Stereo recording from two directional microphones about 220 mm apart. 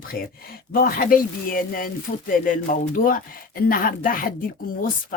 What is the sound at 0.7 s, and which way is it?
A woman's voice, 40° left (ahead or behind).